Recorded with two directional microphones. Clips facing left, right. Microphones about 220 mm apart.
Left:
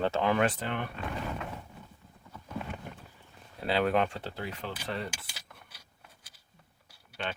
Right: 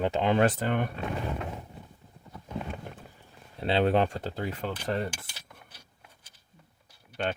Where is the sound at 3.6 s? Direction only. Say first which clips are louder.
Right 3 dB; 25° right (ahead or behind); by 5.3 s 45° right (ahead or behind).